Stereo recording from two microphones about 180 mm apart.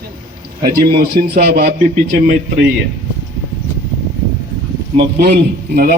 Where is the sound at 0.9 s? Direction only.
60° right (ahead or behind).